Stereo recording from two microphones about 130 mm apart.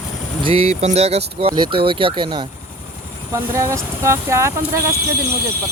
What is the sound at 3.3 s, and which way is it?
Speech, 20° right (ahead or behind).